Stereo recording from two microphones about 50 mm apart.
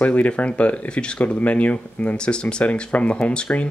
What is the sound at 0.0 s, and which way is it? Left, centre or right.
Speech, left.